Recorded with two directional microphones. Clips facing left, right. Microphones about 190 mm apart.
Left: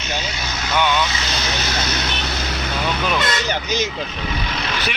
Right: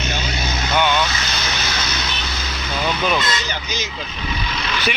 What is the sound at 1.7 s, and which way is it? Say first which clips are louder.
Vehicle: left 3 dB; 55° left (ahead or behind).